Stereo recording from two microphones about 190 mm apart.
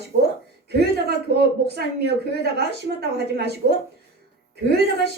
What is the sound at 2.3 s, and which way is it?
A woman's voice, 60° right (ahead or behind).